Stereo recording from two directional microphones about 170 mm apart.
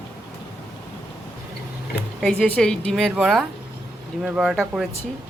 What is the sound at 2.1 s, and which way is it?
A woman's voice, 5° left (ahead or behind).